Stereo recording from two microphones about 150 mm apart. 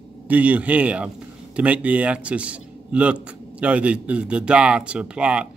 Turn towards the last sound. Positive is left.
turn(degrees=-5)  # may be behind; listen again after turning